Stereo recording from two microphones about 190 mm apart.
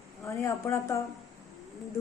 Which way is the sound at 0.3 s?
15° left (ahead or behind).